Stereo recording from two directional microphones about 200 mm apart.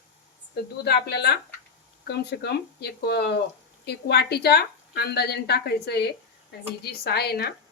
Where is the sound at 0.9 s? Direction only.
55° left (ahead or behind).